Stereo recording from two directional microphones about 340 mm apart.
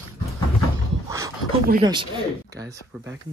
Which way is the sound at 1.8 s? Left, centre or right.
Centre.